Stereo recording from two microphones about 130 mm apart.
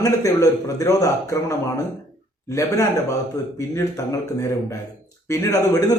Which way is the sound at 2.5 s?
25° left (ahead or behind).